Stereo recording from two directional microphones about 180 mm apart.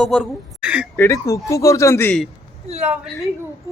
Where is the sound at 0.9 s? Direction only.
15° left (ahead or behind).